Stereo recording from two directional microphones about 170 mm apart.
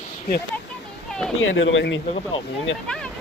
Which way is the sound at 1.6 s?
90° left.